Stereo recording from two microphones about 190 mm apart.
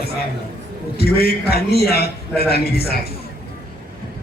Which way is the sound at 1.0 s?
55° left (ahead or behind).